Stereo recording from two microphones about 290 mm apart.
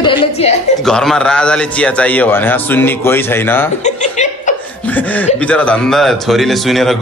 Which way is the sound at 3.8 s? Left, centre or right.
Left.